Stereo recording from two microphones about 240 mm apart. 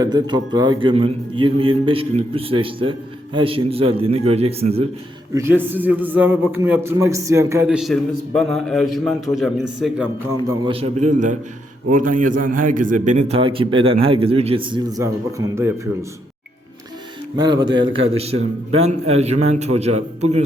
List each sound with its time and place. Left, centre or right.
0.0 s a man's voice: centre
5.3 s a man's voice: centre
10.7 s a man's voice: right
17.3 s a man's voice: centre